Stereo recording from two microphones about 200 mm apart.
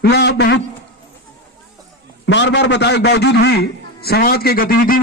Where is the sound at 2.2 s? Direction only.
65° left (ahead or behind).